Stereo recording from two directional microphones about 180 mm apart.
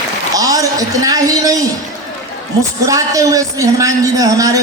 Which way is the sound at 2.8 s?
20° right (ahead or behind).